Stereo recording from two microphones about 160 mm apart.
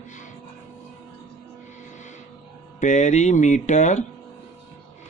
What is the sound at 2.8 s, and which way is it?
Speech, 50° left (ahead or behind).